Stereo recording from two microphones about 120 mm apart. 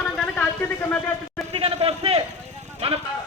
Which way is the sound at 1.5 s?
50° right (ahead or behind).